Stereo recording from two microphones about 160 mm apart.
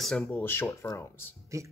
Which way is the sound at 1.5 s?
20° right (ahead or behind).